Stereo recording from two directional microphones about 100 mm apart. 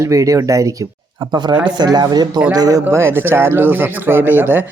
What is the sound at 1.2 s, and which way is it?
Speech, 45° right (ahead or behind).